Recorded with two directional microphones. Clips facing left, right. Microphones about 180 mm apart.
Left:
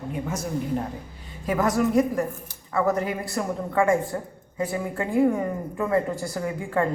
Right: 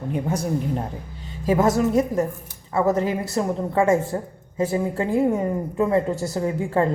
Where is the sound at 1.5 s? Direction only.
25° right (ahead or behind).